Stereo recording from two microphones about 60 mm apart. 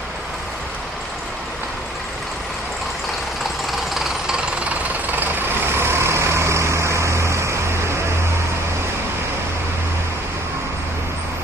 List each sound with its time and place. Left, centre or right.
3.9 s vehicle: centre
5.4 s vehicle: right